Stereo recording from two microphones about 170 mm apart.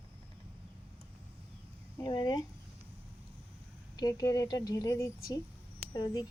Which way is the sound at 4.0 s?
20° left (ahead or behind).